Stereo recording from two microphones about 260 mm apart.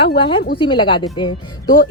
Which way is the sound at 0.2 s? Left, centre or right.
Centre.